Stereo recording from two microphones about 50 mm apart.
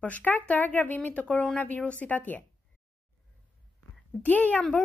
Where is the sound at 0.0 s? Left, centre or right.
Left.